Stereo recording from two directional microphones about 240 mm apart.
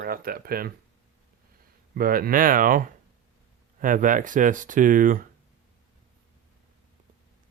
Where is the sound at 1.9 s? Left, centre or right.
Right.